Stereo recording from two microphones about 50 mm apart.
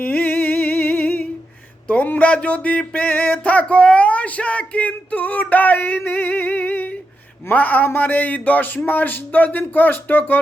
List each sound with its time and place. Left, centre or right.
0.0 s music: left
1.9 s speech: left
2.3 s music: left
7.5 s speech: left